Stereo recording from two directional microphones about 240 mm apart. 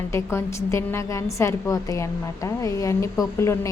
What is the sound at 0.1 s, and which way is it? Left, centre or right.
A woman's voice, centre.